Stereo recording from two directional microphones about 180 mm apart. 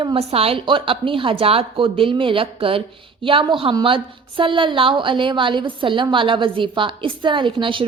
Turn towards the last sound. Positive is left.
turn(degrees=-30)  # may be behind; listen again after turning